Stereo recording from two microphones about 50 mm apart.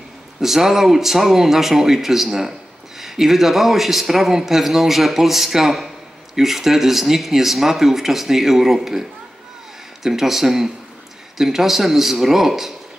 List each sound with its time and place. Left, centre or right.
0.4 s a man's voice: centre
10.0 s a man's voice: centre